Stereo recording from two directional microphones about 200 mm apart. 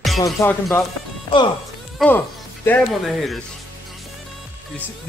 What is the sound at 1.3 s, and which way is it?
Speech, 25° left (ahead or behind).